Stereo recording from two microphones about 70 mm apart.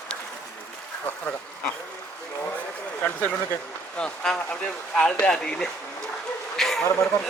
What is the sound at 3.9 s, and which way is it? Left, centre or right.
Speech, centre.